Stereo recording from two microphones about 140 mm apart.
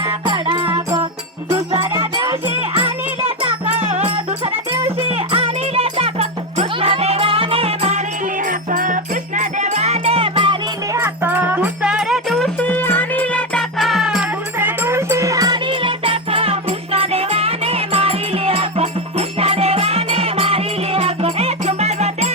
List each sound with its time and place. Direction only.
0.3 s music: 35° right (ahead or behind)
1.8 s music: 35° right (ahead or behind)
5.1 s music: 45° right (ahead or behind)
8.4 s music: 70° right (ahead or behind); by 10.6 s 40° right (ahead or behind)
10.9 s music: 15° right (ahead or behind)
12.5 s music: 10° left (ahead or behind); by 22.3 s 50° right (ahead or behind)